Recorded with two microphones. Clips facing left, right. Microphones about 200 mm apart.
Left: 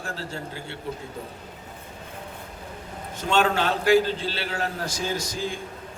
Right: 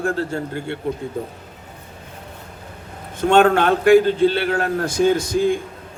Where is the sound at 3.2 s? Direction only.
55° right (ahead or behind).